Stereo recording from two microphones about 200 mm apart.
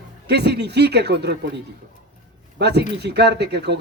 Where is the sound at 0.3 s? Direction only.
55° right (ahead or behind).